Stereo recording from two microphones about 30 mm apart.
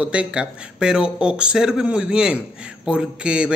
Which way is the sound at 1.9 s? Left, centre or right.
Right.